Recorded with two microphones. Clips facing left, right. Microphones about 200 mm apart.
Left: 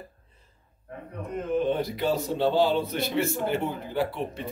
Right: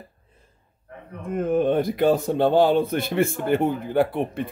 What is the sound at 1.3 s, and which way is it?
A man's voice, 50° right (ahead or behind).